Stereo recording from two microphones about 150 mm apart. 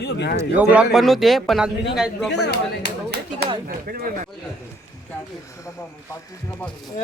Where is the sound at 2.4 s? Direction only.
90° left.